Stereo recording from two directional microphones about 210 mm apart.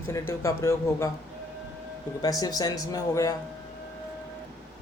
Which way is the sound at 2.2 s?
20° left (ahead or behind).